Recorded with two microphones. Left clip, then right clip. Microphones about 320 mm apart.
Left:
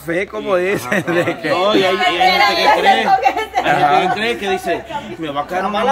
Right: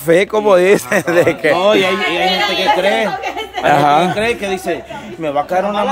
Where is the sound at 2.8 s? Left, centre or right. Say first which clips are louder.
Left 3 dB; centre.